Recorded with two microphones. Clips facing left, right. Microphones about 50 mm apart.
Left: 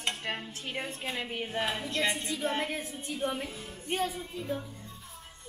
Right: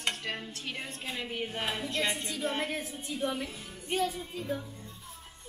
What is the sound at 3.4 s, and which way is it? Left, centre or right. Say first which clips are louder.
Music: left 2 dB; centre.